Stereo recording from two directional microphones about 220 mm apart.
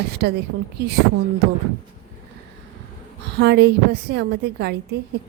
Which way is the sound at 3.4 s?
50° right (ahead or behind).